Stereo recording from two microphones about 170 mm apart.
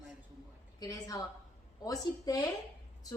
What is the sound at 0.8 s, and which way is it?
A woman's voice, 20° left (ahead or behind).